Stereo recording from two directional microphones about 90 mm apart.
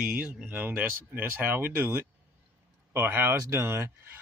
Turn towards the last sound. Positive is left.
turn(degrees=-30)  # may be behind; listen again after turning